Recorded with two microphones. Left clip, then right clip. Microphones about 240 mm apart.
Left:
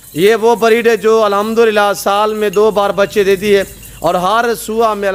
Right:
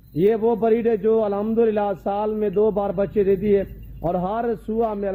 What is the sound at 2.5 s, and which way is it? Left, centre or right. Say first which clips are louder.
Music: left 7 dB; left.